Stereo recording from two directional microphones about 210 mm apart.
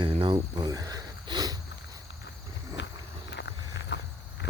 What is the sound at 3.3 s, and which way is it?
Vehicle, 55° left (ahead or behind).